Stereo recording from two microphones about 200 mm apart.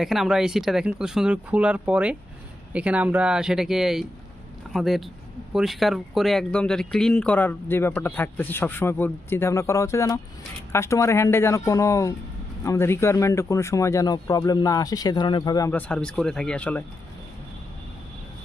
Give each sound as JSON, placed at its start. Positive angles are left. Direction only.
{"t": 0.0, "sound": "speech", "side_deg": 0}
{"t": 15.9, "sound": "speech", "side_deg": 5}